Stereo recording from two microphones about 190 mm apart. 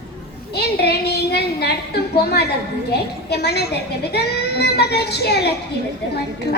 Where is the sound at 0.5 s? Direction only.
60° left (ahead or behind).